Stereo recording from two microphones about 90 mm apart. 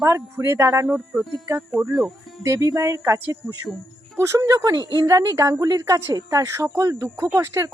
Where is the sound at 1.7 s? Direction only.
20° right (ahead or behind).